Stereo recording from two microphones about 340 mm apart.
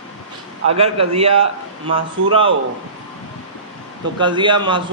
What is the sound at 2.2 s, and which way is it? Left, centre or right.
Speech, right.